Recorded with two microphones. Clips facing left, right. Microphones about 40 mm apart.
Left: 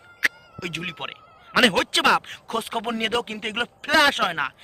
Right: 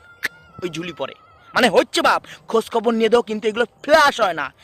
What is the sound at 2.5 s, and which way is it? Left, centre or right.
Speech, left.